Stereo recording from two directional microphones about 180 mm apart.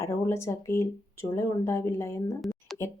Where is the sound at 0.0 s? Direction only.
15° left (ahead or behind).